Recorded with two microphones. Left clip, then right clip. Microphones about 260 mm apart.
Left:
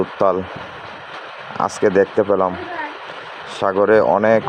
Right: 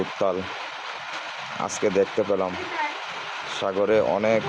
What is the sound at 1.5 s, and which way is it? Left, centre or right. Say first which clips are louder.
Speech: left 8 dB; centre.